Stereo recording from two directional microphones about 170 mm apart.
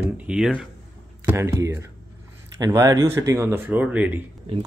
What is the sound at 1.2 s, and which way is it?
Speech, 15° right (ahead or behind).